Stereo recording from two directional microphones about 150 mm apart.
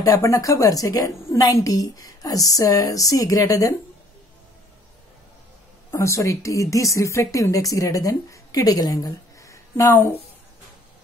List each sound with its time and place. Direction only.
0.0 s speech: 20° left (ahead or behind)
5.9 s speech: 20° left (ahead or behind)